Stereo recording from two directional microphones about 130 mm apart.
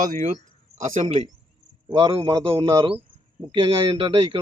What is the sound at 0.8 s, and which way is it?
Speech, 60° right (ahead or behind).